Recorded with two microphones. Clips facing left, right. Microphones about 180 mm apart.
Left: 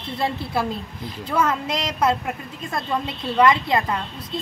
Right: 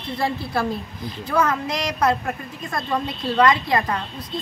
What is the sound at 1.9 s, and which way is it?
A woman's voice, 5° left (ahead or behind).